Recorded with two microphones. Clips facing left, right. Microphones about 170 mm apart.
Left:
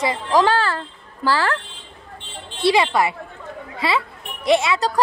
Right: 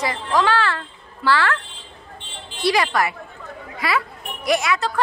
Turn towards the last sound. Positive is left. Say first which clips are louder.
# left 3 dB
turn(degrees=35)  # may be behind; listen again after turning